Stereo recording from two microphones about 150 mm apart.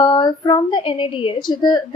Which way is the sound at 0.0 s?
30° left (ahead or behind).